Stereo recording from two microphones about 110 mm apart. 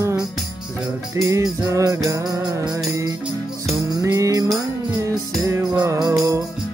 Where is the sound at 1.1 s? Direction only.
30° right (ahead or behind).